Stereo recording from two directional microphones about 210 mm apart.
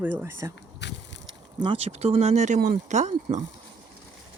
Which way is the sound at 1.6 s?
25° right (ahead or behind).